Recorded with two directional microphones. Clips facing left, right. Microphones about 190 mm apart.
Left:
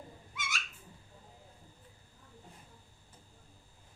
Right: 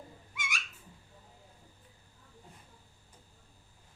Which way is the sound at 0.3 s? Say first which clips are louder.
Even; 15° right (ahead or behind).